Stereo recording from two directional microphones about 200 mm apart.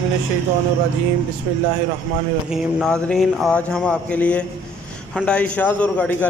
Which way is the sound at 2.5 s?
5° left (ahead or behind).